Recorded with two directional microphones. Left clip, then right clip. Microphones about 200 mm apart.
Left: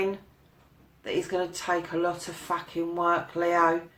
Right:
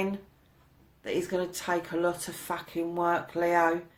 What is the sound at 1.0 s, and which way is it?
Speech, 40° right (ahead or behind).